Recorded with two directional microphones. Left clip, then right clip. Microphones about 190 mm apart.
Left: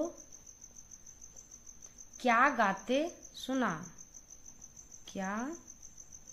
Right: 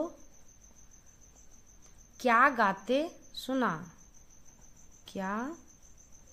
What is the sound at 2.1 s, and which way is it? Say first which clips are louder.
Speech: right 3 dB; 35° right (ahead or behind).